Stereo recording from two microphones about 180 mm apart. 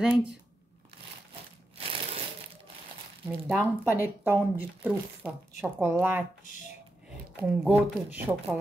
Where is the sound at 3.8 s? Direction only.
10° right (ahead or behind).